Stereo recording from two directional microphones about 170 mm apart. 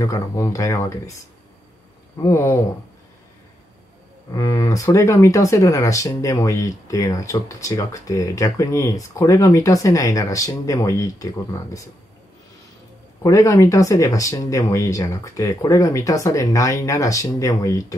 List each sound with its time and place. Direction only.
0.0 s speech: 20° left (ahead or behind)
2.1 s speech: 20° left (ahead or behind)
4.3 s speech: 20° left (ahead or behind)
13.2 s speech: 20° left (ahead or behind)